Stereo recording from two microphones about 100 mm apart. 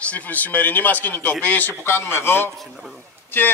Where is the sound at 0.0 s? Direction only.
15° left (ahead or behind).